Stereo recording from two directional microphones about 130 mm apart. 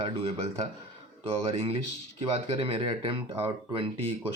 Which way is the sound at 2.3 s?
50° right (ahead or behind).